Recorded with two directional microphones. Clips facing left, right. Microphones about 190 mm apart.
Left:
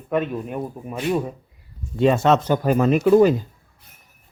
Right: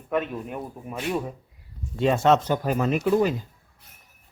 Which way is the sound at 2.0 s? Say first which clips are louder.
Left 3 dB; 90° left.